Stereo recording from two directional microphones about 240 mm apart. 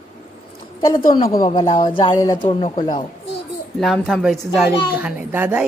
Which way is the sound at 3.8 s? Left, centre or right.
Centre.